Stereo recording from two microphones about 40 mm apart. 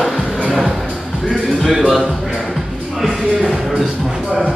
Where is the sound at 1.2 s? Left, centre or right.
Centre.